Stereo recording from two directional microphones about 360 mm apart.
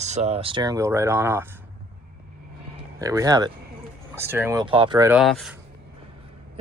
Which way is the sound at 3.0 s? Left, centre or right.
Centre.